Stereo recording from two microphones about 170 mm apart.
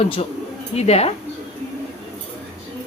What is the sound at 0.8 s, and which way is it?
Speech, 40° left (ahead or behind).